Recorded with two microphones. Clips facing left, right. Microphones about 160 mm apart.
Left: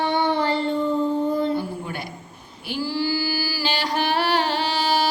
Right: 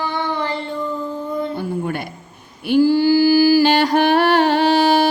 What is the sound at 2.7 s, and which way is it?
Singing, 55° right (ahead or behind).